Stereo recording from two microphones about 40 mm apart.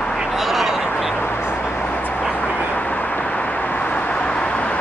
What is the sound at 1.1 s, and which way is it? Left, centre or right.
Vehicle, left.